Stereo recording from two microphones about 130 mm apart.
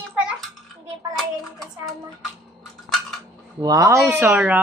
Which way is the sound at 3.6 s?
25° right (ahead or behind).